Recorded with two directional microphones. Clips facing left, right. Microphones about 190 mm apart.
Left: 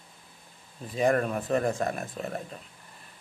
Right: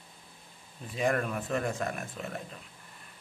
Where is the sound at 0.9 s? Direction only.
35° left (ahead or behind).